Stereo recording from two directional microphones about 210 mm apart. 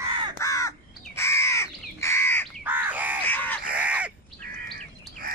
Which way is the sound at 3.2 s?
10° left (ahead or behind).